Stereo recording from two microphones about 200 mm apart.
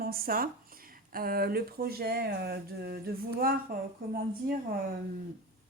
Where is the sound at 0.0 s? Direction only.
45° right (ahead or behind).